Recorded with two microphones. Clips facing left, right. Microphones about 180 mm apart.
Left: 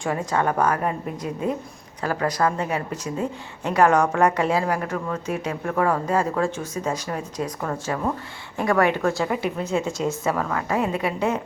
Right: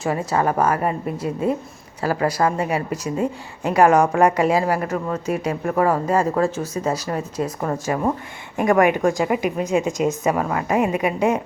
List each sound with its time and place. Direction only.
0.0 s a woman's voice: 5° right (ahead or behind)
4.9 s speech: 25° right (ahead or behind)
5.2 s a woman's voice: 10° right (ahead or behind)